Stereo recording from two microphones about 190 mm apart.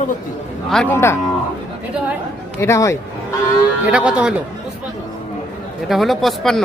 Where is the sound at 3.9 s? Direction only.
5° right (ahead or behind).